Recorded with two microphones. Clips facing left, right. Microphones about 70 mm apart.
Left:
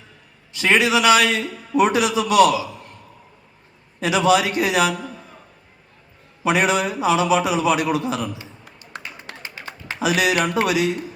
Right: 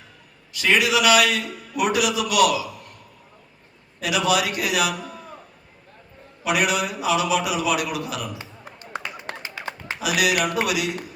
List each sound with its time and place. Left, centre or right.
0.5 s a man's voice: left
4.0 s a man's voice: left
6.4 s a man's voice: left
8.4 s a sound: right
10.0 s a man's voice: left